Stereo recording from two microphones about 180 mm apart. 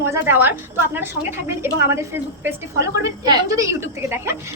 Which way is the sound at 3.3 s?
20° right (ahead or behind).